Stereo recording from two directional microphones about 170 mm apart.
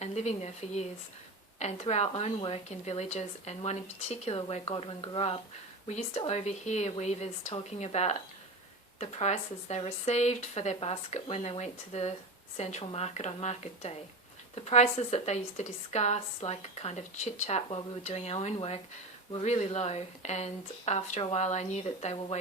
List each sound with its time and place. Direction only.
0.0 s speech: 40° left (ahead or behind)